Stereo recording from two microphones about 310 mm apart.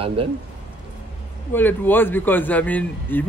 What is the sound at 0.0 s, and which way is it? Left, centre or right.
Speech, centre.